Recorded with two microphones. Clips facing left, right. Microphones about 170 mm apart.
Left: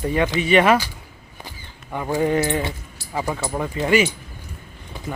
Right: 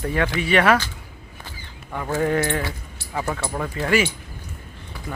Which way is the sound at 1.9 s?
15° left (ahead or behind).